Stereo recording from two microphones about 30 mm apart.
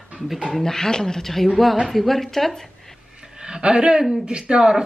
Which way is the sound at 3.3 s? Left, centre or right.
Right.